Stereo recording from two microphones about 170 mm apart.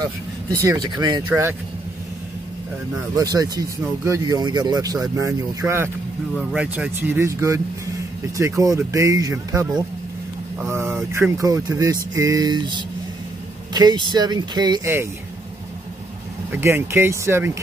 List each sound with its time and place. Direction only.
0.0 s speech: 20° right (ahead or behind)
3.2 s speech: 20° right (ahead or behind)
6.3 s speech: 5° right (ahead or behind); by 14.8 s 25° right (ahead or behind)
16.5 s speech: 15° right (ahead or behind)